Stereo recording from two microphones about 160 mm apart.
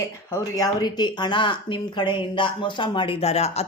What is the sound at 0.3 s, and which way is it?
Speech, 20° left (ahead or behind).